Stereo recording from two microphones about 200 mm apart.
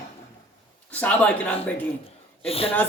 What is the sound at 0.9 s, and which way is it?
Speech, 5° left (ahead or behind).